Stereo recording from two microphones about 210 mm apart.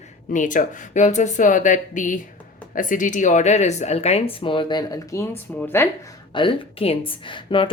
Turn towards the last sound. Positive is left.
turn(degrees=25)  # may be behind; listen again after turning